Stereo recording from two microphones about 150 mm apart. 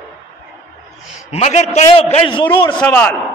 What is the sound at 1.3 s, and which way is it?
A man's voice, 50° left (ahead or behind).